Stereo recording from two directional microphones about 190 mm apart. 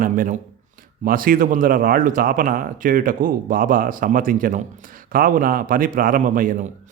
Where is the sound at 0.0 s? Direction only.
45° right (ahead or behind).